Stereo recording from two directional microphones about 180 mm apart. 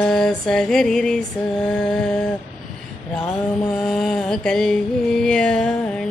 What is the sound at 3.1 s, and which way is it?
Mantra, centre (ahead or behind).